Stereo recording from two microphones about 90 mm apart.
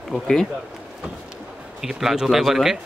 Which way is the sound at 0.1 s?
5° left (ahead or behind).